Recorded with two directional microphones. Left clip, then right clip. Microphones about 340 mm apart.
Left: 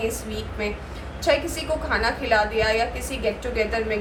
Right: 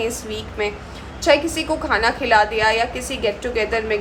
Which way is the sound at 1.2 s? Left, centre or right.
Right.